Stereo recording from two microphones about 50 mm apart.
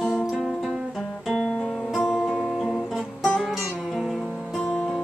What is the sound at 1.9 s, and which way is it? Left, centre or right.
Music, centre.